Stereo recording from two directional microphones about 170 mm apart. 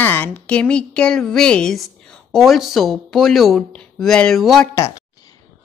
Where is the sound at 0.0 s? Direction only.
10° left (ahead or behind).